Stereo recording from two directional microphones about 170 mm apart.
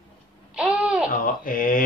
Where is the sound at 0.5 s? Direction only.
5° right (ahead or behind).